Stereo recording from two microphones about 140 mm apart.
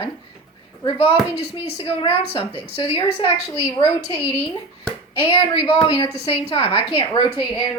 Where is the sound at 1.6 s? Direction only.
40° left (ahead or behind).